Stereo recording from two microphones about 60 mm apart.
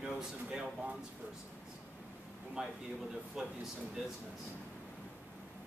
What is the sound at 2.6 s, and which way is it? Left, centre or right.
Speech, centre.